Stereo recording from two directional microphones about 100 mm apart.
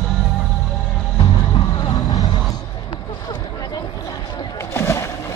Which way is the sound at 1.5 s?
45° left (ahead or behind).